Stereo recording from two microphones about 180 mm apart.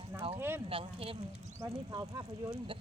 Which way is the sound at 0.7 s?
30° right (ahead or behind).